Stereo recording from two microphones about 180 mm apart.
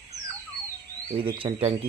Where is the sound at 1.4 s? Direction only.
20° right (ahead or behind).